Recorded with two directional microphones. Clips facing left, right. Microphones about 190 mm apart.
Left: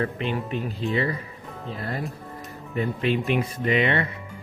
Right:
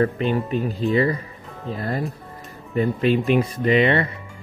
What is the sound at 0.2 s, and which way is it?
Speech, 40° right (ahead or behind).